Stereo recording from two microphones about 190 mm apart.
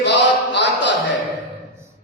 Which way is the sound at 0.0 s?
65° left (ahead or behind).